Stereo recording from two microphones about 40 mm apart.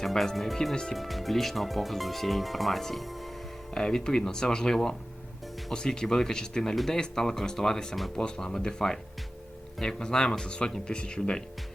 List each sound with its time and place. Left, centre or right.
0.0 s speech: centre
0.9 s speech: centre
3.8 s speech: centre